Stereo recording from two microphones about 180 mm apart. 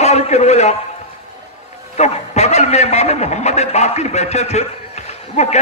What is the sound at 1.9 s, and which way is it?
A man's voice, 40° left (ahead or behind).